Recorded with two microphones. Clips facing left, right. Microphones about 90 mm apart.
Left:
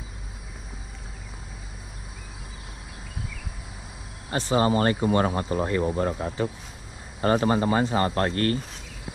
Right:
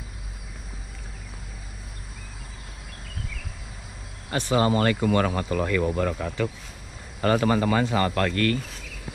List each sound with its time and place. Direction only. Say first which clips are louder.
4.4 s speech: even; 20° left (ahead or behind)